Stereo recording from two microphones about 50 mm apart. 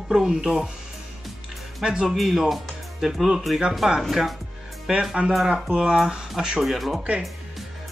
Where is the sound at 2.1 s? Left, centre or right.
Centre.